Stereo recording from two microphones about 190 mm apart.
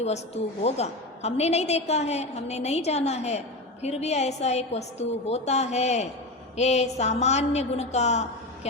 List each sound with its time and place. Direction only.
0.6 s a woman's voice: 35° left (ahead or behind)